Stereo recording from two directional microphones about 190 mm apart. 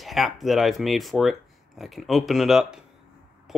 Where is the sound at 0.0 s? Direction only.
Centre (ahead or behind).